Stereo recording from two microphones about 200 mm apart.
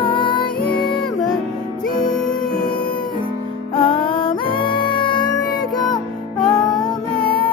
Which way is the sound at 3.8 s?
25° left (ahead or behind).